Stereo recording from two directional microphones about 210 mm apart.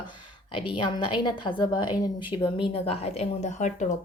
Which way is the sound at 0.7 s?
20° left (ahead or behind).